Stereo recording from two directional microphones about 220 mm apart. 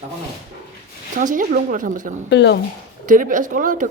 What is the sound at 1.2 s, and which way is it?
Speech, 35° right (ahead or behind).